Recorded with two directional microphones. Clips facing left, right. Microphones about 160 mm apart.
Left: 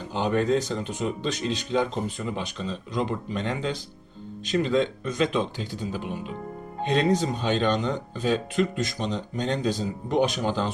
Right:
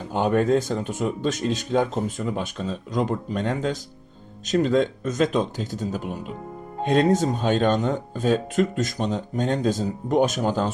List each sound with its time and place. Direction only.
0.1 s speech: 50° right (ahead or behind)